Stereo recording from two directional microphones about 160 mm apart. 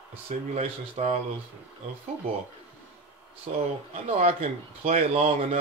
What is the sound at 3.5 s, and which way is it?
Speech, 45° right (ahead or behind).